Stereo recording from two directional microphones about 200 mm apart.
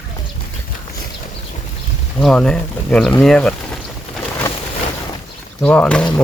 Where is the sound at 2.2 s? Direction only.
Centre (ahead or behind).